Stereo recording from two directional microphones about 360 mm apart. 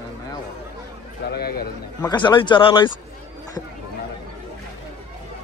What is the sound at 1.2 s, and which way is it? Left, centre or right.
Speech, left.